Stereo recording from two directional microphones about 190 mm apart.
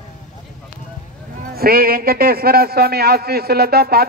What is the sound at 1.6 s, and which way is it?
A man's voice, 50° right (ahead or behind).